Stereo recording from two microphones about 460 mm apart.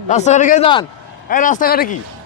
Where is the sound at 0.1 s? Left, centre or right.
Centre.